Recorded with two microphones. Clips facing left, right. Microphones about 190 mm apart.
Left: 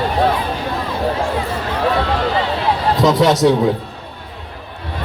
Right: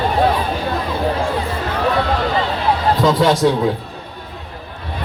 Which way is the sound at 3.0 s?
20° left (ahead or behind).